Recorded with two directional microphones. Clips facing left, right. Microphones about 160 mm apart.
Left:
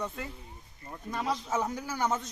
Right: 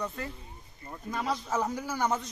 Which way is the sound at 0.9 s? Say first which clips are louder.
Even; 5° right (ahead or behind).